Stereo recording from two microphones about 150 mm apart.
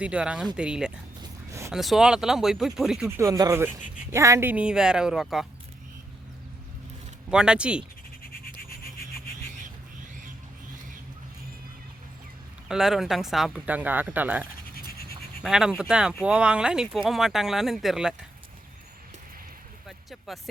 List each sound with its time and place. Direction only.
0.0 s speech: 5° right (ahead or behind)
1.2 s a sound: 20° right (ahead or behind)
1.7 s speech: centre (ahead or behind)
3.1 s speech: 20° right (ahead or behind); by 5.5 s centre (ahead or behind)
7.3 s speech: 5° right (ahead or behind)
12.6 s speech: 5° right (ahead or behind)
15.4 s speech: 5° right (ahead or behind)
20.1 s speech: centre (ahead or behind)